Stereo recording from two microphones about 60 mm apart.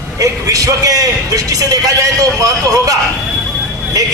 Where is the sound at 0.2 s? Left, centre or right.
Right.